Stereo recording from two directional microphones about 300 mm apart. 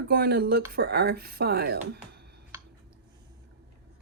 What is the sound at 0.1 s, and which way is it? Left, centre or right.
Speech, right.